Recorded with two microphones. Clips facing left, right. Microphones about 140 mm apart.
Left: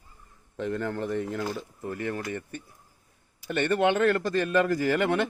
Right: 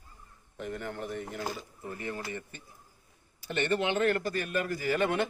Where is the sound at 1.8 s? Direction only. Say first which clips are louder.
Left 6 dB; 65° left (ahead or behind).